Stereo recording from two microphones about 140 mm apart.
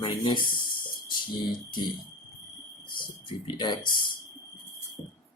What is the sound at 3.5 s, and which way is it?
Speech, 30° left (ahead or behind).